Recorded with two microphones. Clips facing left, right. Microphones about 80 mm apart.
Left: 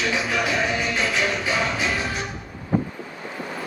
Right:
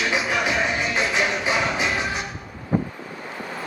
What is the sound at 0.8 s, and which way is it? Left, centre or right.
Music, right.